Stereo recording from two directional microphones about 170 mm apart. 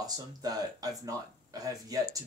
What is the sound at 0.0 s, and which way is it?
Speech, 20° right (ahead or behind).